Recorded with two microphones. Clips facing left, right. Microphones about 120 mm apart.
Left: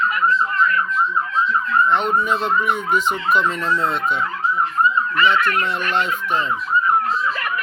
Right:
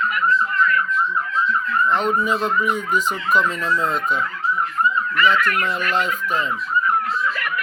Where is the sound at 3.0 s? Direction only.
40° right (ahead or behind).